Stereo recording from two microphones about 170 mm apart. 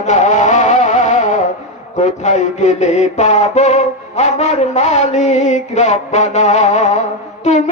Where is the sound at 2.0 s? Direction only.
45° left (ahead or behind).